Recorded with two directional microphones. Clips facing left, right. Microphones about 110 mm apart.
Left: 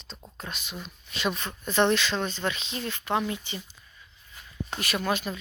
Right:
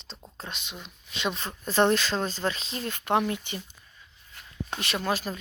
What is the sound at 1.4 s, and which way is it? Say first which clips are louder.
Speech: right 1 dB; 35° right (ahead or behind).